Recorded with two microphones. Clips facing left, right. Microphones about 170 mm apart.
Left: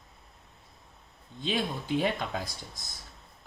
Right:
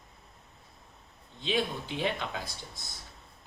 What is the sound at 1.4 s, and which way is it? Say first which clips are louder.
Speech: even; 45° left (ahead or behind).